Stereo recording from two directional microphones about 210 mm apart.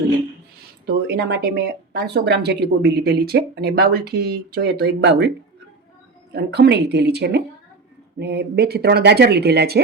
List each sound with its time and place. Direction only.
1.0 s speech: 50° right (ahead or behind)
6.3 s speech: 50° right (ahead or behind)